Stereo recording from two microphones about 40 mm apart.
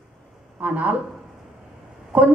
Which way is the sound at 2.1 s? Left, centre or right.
Right.